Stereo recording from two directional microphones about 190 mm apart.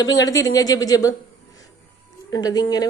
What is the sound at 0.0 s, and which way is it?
Speech, 20° left (ahead or behind).